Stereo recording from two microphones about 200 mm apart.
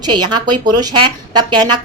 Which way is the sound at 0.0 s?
20° right (ahead or behind).